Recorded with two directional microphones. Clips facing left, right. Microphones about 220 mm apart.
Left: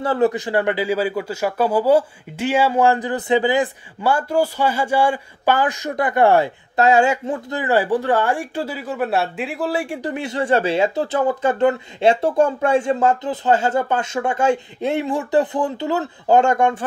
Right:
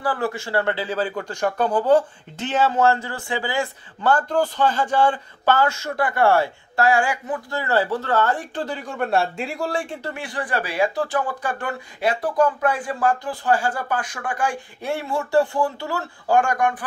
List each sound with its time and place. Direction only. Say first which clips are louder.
0.0 s speech: left 7 dB; 20° left (ahead or behind)